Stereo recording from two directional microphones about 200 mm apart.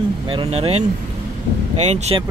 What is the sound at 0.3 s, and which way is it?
Speech, 30° right (ahead or behind).